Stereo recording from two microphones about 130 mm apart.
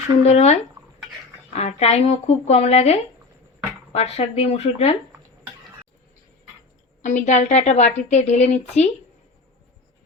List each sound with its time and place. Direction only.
0.3 s a woman's voice: 55° left (ahead or behind)
7.0 s a woman's voice: 70° left (ahead or behind)